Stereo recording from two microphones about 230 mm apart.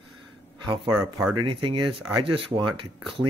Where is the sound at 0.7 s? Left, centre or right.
Centre.